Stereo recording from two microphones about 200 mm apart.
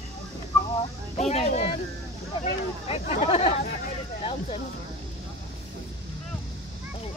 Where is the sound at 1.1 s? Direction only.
35° left (ahead or behind).